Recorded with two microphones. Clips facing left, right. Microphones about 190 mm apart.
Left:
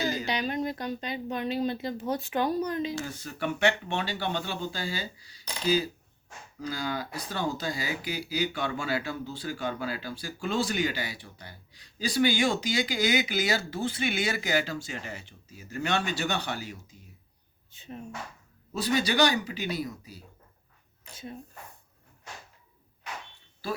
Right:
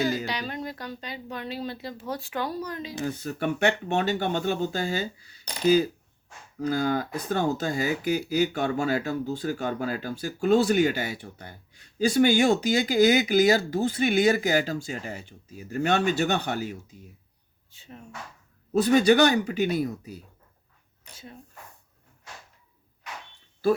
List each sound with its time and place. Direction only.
0.3 s speech: 20° left (ahead or behind)
3.1 s speech: 45° right (ahead or behind)
17.7 s speech: 20° left (ahead or behind)
18.7 s speech: 50° right (ahead or behind)